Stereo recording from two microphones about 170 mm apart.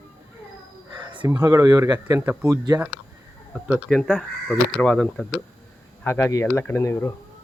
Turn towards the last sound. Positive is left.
turn(degrees=15)  # may be behind; listen again after turning